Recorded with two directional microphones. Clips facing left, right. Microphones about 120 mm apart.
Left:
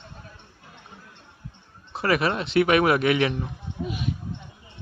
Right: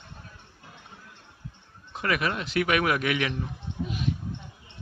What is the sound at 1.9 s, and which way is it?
Speech, 30° left (ahead or behind).